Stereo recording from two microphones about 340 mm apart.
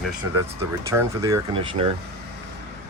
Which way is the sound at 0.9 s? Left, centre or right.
Centre.